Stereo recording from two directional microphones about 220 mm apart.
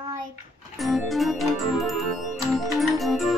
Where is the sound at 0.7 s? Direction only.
Centre (ahead or behind).